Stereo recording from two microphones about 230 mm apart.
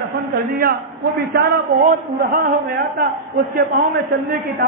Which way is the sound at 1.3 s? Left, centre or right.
Right.